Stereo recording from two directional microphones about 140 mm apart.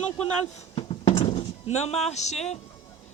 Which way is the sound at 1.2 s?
50° left (ahead or behind).